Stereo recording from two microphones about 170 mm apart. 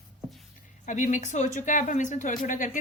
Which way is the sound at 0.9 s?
45° left (ahead or behind).